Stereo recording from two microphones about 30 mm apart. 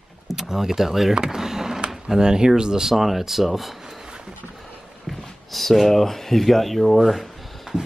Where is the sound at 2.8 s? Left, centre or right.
Centre.